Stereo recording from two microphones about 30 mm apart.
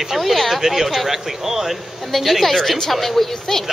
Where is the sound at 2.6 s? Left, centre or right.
Centre.